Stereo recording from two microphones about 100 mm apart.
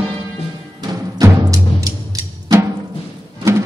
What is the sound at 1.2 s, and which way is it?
Music, 35° right (ahead or behind).